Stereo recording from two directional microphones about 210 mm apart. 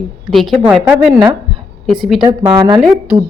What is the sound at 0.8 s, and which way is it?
Speech, 10° right (ahead or behind).